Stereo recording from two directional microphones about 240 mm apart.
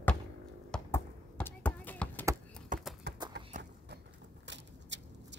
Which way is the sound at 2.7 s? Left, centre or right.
Right.